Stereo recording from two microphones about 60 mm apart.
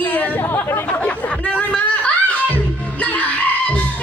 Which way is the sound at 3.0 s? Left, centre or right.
Left.